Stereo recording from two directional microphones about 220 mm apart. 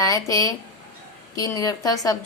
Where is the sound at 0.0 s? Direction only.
15° left (ahead or behind).